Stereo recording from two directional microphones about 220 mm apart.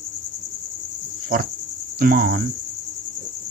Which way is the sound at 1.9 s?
40° right (ahead or behind).